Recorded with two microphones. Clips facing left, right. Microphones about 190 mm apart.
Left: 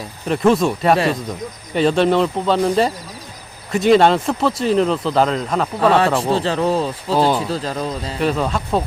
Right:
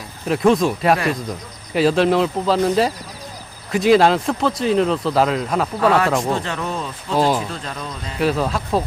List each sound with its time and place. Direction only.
0.3 s speech: centre (ahead or behind)
5.8 s speech: 30° left (ahead or behind)
8.2 s speech: centre (ahead or behind)